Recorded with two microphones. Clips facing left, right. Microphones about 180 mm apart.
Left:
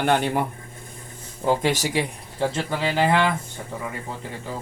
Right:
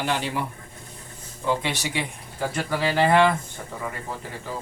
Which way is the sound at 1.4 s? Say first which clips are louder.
Left 4 dB; 40° left (ahead or behind).